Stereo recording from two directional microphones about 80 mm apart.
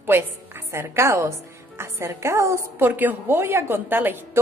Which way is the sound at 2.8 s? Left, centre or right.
Right.